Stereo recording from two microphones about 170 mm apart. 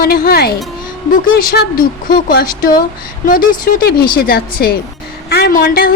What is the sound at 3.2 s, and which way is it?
A woman's voice, 55° left (ahead or behind).